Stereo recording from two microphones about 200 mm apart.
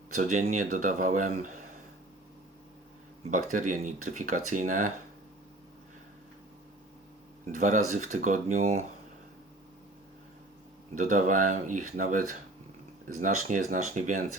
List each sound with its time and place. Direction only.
0.1 s speech: 40° right (ahead or behind)
3.2 s speech: 40° right (ahead or behind)
7.5 s speech: 40° right (ahead or behind)
10.9 s speech: 40° right (ahead or behind)